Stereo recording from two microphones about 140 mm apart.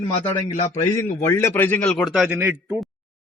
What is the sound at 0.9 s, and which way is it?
A man's voice, 20° left (ahead or behind).